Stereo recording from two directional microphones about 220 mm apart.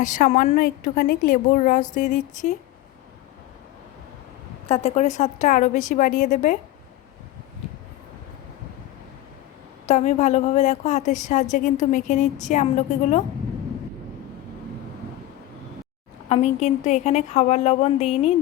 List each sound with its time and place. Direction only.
0.0 s a woman's voice: 35° left (ahead or behind)
4.7 s a woman's voice: 30° left (ahead or behind)
9.8 s a woman's voice: 30° left (ahead or behind)
16.3 s a woman's voice: 30° left (ahead or behind)